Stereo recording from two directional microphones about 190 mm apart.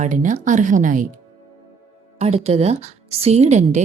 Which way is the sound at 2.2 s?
35° right (ahead or behind).